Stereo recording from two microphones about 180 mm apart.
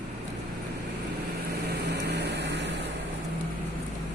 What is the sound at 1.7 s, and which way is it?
Vehicle, 65° right (ahead or behind).